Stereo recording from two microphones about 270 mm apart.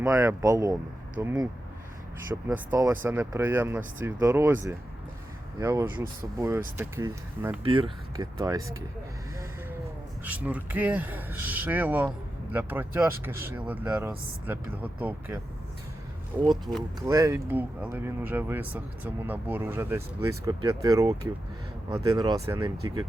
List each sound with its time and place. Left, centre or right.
0.0 s speech: centre
7.6 s speech: centre
10.2 s speech: centre